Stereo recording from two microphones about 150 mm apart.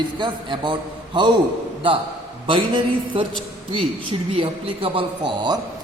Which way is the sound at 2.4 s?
35° right (ahead or behind).